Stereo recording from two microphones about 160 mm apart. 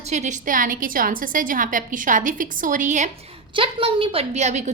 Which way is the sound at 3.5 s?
35° right (ahead or behind).